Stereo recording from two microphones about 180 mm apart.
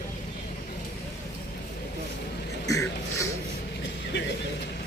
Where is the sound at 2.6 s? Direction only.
20° left (ahead or behind).